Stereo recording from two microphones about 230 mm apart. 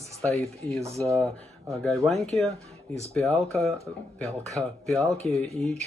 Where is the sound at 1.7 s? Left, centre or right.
Centre.